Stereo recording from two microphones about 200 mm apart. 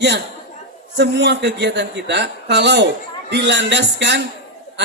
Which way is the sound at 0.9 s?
60° right (ahead or behind).